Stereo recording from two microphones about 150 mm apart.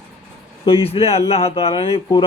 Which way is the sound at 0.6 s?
40° left (ahead or behind).